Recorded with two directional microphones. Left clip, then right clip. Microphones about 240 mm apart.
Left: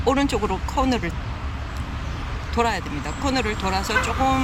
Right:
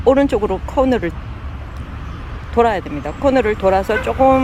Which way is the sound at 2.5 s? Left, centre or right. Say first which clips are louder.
Right 8 dB; centre.